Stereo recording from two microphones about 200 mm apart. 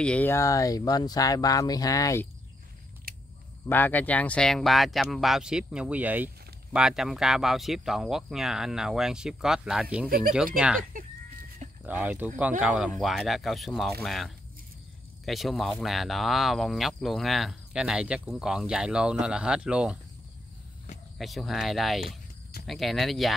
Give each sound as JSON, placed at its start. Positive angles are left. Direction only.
{"t": 0.0, "sound": "speech", "side_deg": 5}
{"t": 3.6, "sound": "speech", "side_deg": 10}
{"t": 10.0, "sound": "speech", "side_deg": -45}
{"t": 10.3, "sound": "speech", "side_deg": -5}
{"t": 11.8, "sound": "speech", "side_deg": -10}
{"t": 21.2, "sound": "speech", "side_deg": 0}